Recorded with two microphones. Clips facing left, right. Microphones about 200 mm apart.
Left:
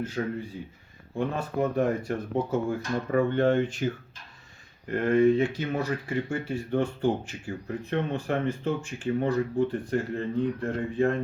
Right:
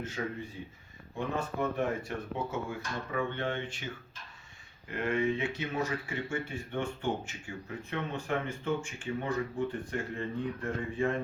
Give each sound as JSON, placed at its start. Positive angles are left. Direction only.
{"t": 0.2, "sound": "speech", "side_deg": 45}
{"t": 1.5, "sound": "speech", "side_deg": 40}
{"t": 4.9, "sound": "speech", "side_deg": 35}